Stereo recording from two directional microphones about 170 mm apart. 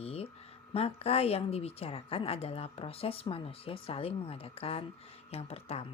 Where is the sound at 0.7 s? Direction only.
35° left (ahead or behind).